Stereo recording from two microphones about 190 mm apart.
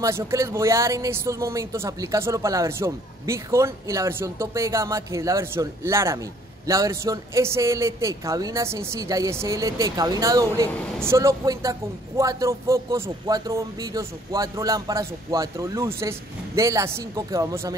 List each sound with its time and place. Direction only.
0.0 s speech: 15° right (ahead or behind)